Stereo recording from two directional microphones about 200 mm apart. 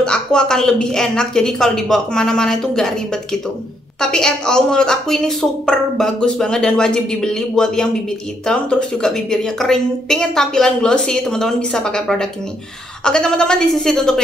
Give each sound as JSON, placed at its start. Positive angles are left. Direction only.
{"t": 0.0, "sound": "a woman's voice", "side_deg": 5}